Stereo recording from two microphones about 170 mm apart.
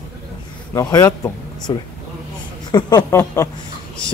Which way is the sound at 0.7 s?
20° left (ahead or behind).